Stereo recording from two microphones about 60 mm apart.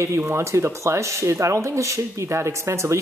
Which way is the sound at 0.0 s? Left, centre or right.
Right.